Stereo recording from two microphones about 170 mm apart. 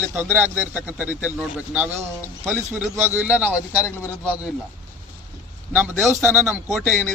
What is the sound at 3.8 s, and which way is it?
Speech, 15° left (ahead or behind).